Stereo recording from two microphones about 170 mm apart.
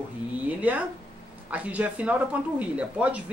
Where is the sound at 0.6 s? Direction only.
10° right (ahead or behind).